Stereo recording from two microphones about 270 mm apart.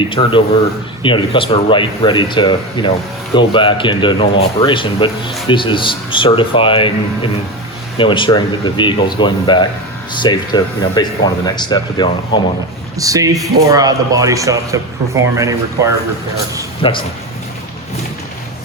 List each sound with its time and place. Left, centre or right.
0.0 s speech: centre
13.0 s speech: centre
16.8 s speech: centre